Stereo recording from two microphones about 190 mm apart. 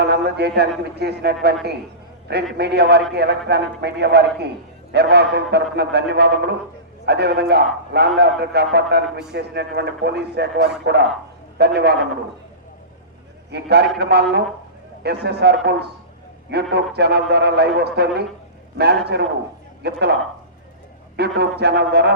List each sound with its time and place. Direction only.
0.0 s a man's voice: 60° right (ahead or behind)
13.5 s a man's voice: 60° right (ahead or behind)
21.2 s a man's voice: 60° right (ahead or behind)